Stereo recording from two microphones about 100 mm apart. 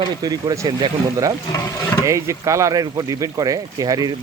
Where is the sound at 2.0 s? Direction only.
30° right (ahead or behind).